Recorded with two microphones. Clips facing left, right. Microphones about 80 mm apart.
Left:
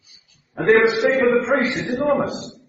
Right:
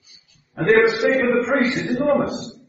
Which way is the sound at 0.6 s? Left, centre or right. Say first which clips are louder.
Even; centre.